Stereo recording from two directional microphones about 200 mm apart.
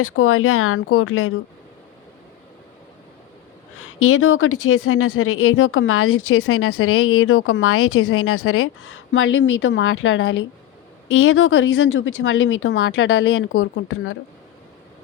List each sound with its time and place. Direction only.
0.0 s speech: 90° left
3.8 s speech: 90° left; by 10.3 s 70° left (ahead or behind)
11.1 s speech: 90° left